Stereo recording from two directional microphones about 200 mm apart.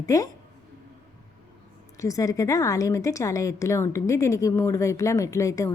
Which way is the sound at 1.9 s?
15° left (ahead or behind).